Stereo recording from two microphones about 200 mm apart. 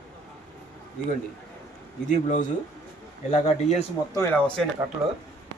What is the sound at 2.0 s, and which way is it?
Speech, 40° left (ahead or behind).